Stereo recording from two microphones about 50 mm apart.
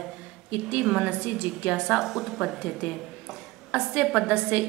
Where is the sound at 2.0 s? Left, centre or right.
Centre.